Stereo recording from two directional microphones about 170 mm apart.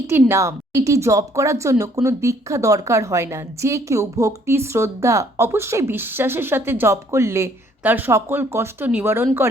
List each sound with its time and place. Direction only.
0.1 s a woman's voice: 15° right (ahead or behind)